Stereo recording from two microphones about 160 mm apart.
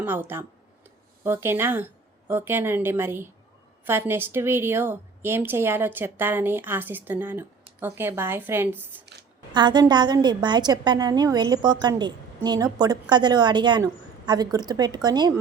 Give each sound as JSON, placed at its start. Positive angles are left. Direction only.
{"t": 0.0, "sound": "a woman's voice", "side_deg": -15}
{"t": 9.5, "sound": "a woman's voice", "side_deg": -30}